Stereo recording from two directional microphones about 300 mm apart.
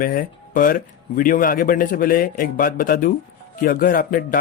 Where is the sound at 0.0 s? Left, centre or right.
Left.